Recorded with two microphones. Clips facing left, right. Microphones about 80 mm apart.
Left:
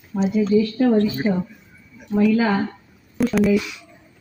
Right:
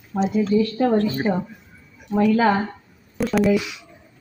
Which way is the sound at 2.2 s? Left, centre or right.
Right.